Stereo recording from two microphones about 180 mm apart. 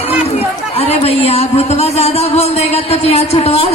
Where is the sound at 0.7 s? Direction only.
35° left (ahead or behind).